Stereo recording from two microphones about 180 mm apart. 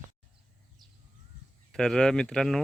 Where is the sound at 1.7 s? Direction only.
5° left (ahead or behind).